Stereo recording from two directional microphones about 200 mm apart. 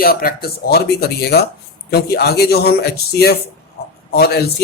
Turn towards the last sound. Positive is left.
turn(degrees=50)  # may be behind; listen again after turning